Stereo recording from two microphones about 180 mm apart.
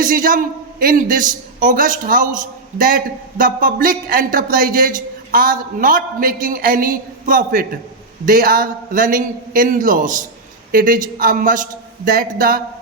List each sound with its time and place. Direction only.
0.0 s a man's voice: 50° right (ahead or behind)